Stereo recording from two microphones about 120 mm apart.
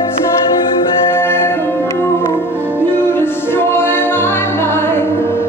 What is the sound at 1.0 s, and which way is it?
Music, 20° left (ahead or behind).